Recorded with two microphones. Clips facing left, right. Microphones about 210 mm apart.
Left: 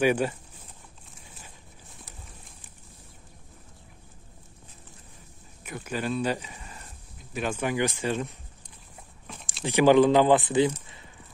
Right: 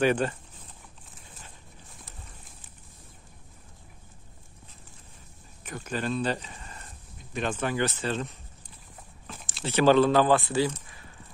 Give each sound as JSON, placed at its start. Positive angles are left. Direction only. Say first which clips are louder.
{"t": 0.0, "sound": "speech", "louder": "left 1 dB", "side_deg": 10}
{"t": 5.6, "sound": "speech", "louder": "even", "side_deg": 10}
{"t": 9.3, "sound": "a sound", "louder": "left 2 dB", "side_deg": 0}
{"t": 9.7, "sound": "speech", "louder": "left 2 dB", "side_deg": 15}